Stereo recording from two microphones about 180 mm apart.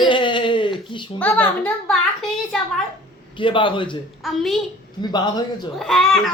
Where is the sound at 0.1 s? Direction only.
25° left (ahead or behind).